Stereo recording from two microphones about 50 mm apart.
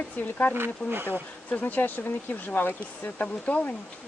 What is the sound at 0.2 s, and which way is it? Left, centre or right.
Speech, left.